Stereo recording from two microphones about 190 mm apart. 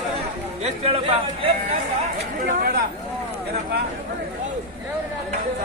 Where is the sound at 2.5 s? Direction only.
50° right (ahead or behind).